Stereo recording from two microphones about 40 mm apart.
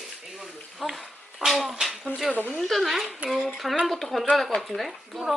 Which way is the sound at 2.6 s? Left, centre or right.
Centre.